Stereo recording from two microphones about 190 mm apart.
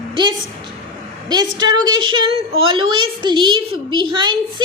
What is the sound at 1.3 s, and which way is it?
A woman's voice, 20° right (ahead or behind).